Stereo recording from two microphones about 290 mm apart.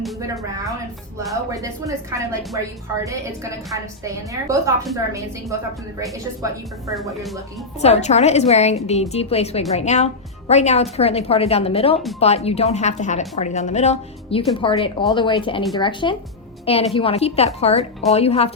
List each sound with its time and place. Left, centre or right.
1.3 s speech: centre
7.1 s speech: centre
7.8 s a woman's voice: left